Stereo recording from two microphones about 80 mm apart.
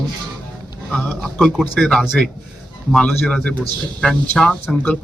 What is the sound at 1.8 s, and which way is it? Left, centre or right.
Speech, centre.